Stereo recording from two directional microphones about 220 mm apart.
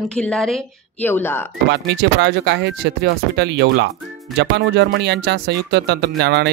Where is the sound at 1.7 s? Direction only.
50° right (ahead or behind).